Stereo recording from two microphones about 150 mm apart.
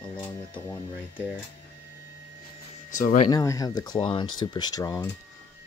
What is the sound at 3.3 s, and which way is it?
Speech, 25° left (ahead or behind).